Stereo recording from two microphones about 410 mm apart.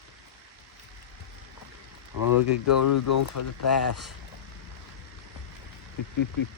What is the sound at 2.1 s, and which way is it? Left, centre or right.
Speech, left.